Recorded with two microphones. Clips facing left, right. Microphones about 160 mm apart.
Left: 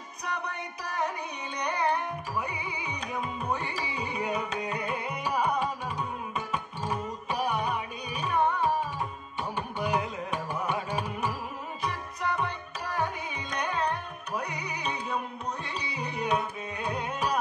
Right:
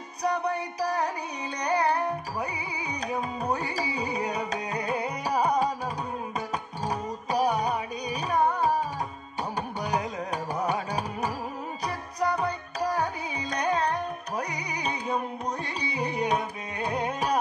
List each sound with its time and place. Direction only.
0.2 s music: 35° right (ahead or behind)